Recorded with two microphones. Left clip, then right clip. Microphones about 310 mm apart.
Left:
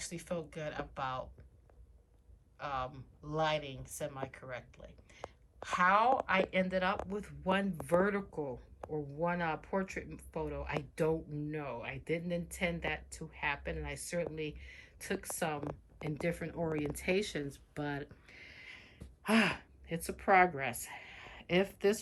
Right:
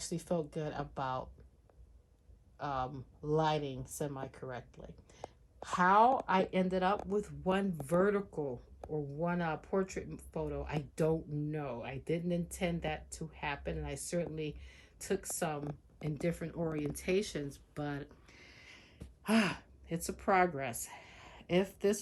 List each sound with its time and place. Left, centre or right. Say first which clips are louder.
0.1 s speech: right 8 dB; centre
2.6 s speech: right 1 dB; centre
15.6 s speech: left 2 dB; right
16.2 s speech: even; centre
16.9 s a sound: even; centre
20.1 s a woman's voice: left 3 dB; centre